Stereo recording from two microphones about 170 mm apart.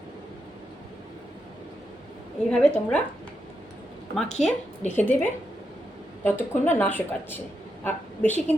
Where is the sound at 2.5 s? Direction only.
5° left (ahead or behind).